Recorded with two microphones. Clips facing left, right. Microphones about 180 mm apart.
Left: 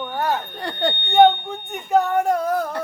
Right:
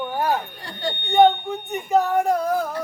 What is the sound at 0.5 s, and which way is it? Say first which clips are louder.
Speech: left 5 dB; 65° left (ahead or behind).